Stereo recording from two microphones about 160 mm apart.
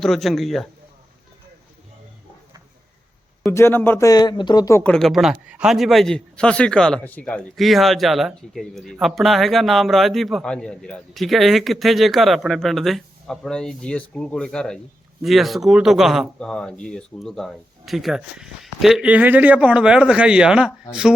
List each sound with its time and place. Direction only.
0.0 s a man's voice: centre (ahead or behind)
3.5 s speech: 15° left (ahead or behind)
4.8 s a man's voice: 5° left (ahead or behind)